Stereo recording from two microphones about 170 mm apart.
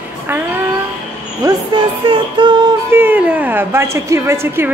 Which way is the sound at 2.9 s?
10° right (ahead or behind).